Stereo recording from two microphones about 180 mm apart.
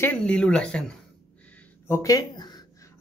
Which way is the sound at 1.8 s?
15° left (ahead or behind).